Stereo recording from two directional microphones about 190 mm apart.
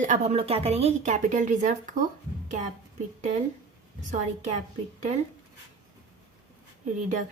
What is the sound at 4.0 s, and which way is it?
Speech, 45° right (ahead or behind).